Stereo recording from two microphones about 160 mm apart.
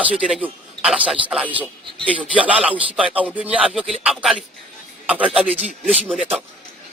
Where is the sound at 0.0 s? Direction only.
5° right (ahead or behind).